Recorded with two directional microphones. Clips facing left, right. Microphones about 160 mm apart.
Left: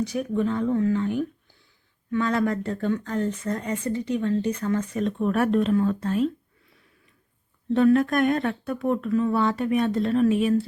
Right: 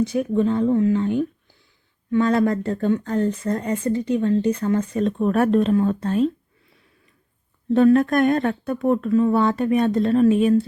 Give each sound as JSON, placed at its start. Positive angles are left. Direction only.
{"t": 0.1, "sound": "speech", "side_deg": -30}
{"t": 7.7, "sound": "speech", "side_deg": -40}